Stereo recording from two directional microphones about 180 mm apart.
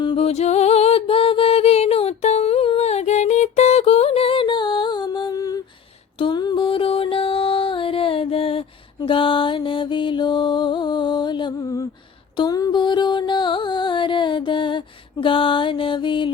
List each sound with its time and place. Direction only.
0.0 s music: 30° left (ahead or behind)